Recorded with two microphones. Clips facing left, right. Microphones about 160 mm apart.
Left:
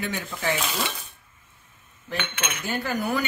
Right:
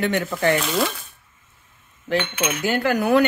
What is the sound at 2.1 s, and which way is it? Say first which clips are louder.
Cutlery: right 8 dB; 85° right.